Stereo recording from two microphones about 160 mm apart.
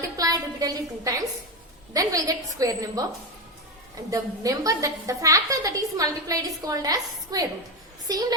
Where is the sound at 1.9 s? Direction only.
20° right (ahead or behind).